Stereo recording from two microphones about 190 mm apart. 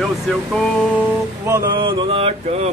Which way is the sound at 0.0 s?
Centre (ahead or behind).